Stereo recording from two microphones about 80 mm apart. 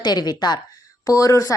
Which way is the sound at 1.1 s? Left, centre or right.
Left.